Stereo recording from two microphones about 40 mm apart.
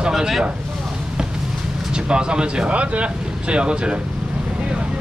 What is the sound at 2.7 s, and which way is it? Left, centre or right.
Speech, right.